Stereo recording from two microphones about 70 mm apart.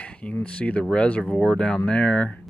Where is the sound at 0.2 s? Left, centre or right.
Centre.